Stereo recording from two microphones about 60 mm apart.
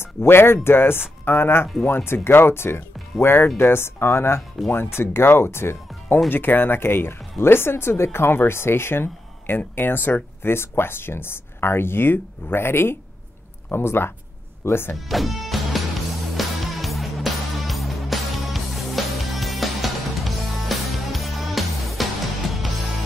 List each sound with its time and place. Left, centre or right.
0.0 s speech: left
15.0 s music: centre